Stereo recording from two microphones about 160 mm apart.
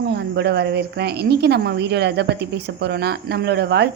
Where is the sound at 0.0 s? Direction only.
90° right.